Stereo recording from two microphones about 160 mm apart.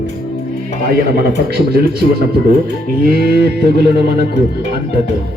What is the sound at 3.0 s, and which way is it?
Music, 75° right (ahead or behind).